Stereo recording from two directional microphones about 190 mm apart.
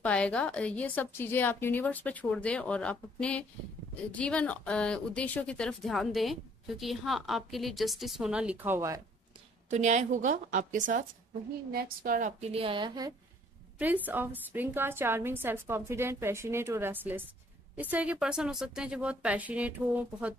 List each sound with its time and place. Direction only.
0.0 s a woman's voice: 5° left (ahead or behind); by 9.0 s 15° right (ahead or behind)
9.7 s a woman's voice: 40° right (ahead or behind); by 13.1 s 25° right (ahead or behind)
14.0 s a woman's voice: 10° right (ahead or behind)